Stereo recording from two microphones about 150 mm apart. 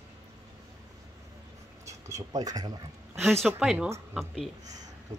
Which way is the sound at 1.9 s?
20° right (ahead or behind).